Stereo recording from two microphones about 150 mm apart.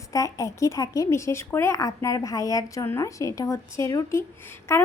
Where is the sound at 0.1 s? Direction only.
20° left (ahead or behind).